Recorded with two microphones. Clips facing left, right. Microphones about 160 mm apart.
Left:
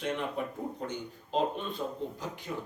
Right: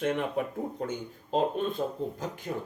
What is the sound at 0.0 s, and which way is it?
Speech, 50° right (ahead or behind).